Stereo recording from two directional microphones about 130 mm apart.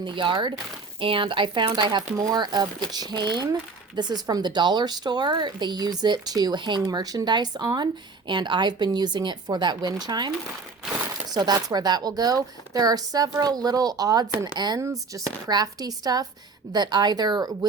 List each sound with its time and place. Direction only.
0.0 s speech: 40° right (ahead or behind)